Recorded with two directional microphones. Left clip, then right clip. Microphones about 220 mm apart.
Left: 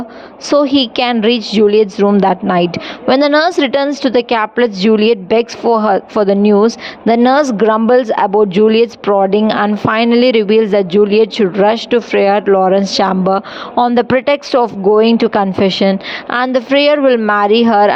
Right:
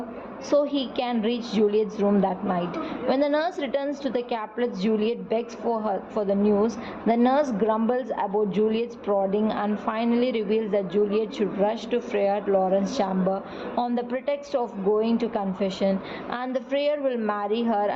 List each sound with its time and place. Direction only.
0.5 s a woman's voice: 45° left (ahead or behind)